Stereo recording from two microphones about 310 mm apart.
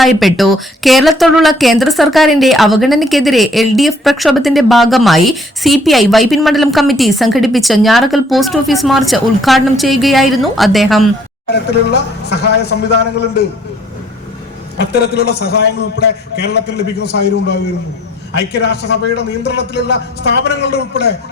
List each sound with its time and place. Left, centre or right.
0.0 s a woman's voice: centre
11.5 s a man's voice: left
14.9 s a man's voice: left